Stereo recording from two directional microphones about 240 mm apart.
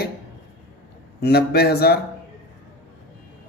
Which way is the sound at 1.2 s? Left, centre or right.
Left.